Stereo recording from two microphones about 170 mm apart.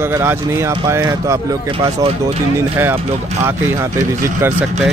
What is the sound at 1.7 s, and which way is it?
Speech, 35° right (ahead or behind).